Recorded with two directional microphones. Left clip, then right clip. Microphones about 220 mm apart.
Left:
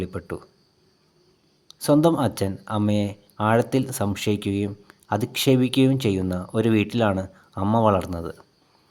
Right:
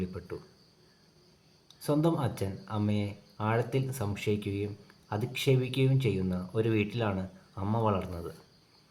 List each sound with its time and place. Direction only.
0.0 s speech: 50° left (ahead or behind)
1.8 s speech: 45° left (ahead or behind)